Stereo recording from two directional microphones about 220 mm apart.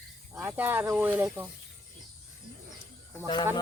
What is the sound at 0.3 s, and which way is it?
Speech, 10° right (ahead or behind).